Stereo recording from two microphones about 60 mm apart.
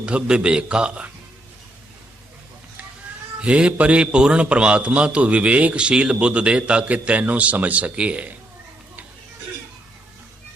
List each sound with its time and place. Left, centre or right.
0.0 s a man's voice: centre
3.4 s a man's voice: centre